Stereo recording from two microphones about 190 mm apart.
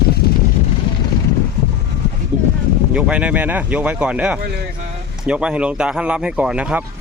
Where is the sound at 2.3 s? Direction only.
5° right (ahead or behind).